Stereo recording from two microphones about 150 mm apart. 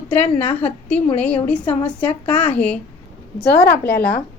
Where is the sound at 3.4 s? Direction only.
90° left.